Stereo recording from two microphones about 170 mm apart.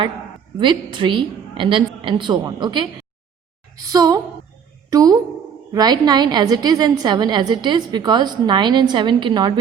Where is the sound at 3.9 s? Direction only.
20° right (ahead or behind).